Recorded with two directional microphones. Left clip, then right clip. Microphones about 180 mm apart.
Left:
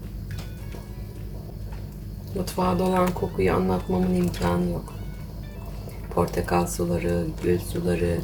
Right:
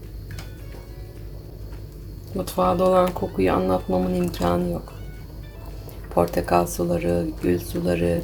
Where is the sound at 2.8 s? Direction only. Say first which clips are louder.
Right 5 dB; 35° right (ahead or behind).